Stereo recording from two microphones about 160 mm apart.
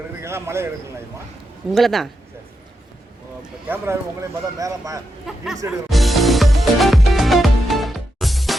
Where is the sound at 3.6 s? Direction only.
15° right (ahead or behind).